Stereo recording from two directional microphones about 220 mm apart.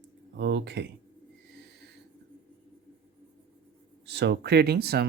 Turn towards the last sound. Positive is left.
turn(degrees=-45)  # may be behind; listen again after turning